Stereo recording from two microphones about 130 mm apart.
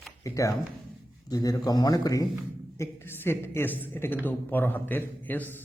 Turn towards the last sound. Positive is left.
turn(degrees=15)  # may be behind; listen again after turning